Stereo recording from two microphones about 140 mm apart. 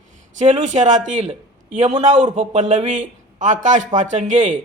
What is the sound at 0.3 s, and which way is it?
A man's voice, 55° right (ahead or behind).